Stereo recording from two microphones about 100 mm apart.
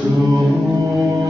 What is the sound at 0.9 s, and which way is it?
Music, 30° right (ahead or behind).